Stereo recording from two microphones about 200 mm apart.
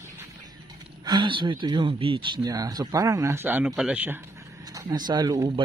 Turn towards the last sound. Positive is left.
turn(degrees=-15)  # may be behind; listen again after turning